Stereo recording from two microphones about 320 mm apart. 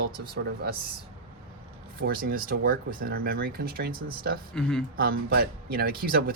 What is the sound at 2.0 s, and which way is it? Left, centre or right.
Speech, right.